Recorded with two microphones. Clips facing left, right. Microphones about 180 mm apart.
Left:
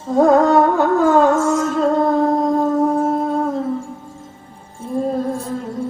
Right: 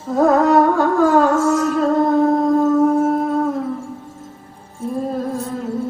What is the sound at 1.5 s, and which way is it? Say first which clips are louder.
Music: even; 30° left (ahead or behind).